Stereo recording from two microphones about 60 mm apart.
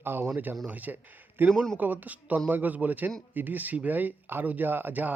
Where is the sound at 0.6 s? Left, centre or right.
Right.